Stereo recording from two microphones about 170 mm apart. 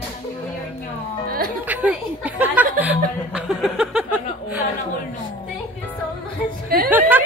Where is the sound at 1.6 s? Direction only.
10° right (ahead or behind).